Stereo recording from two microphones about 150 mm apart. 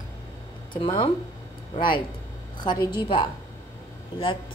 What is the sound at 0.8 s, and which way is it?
Speech, 40° left (ahead or behind).